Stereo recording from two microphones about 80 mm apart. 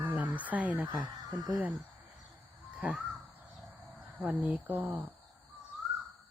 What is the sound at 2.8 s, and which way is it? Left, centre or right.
Crow, centre.